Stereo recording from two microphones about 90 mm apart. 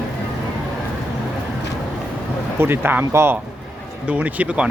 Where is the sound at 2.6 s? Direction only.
25° right (ahead or behind).